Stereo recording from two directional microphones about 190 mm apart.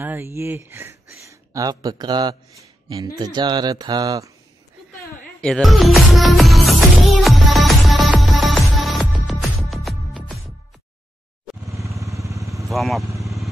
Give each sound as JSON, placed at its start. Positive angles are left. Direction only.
{"t": 0.0, "sound": "speech", "side_deg": -10}
{"t": 5.4, "sound": "music", "side_deg": 0}
{"t": 11.7, "sound": "motorcycle", "side_deg": -15}
{"t": 12.3, "sound": "vehicle", "side_deg": -15}
{"t": 12.6, "sound": "speech", "side_deg": 0}
{"t": 13.2, "sound": "vehicle", "side_deg": 0}